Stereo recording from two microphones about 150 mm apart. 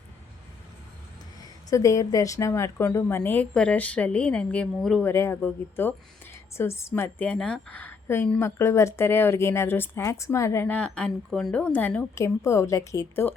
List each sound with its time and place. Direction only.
1.7 s a woman's voice: 20° left (ahead or behind); by 5.0 s 5° left (ahead or behind)
5.0 s a woman's voice: 15° left (ahead or behind)